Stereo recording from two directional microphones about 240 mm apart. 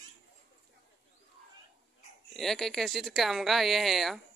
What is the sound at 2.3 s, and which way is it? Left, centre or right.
Speech, centre.